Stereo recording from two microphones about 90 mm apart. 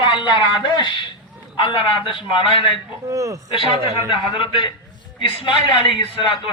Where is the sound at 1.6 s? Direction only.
80° left.